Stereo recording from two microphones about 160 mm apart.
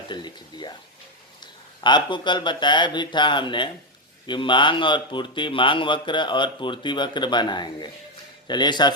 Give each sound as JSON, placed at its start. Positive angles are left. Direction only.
{"t": 0.1, "sound": "a man's voice", "side_deg": 30}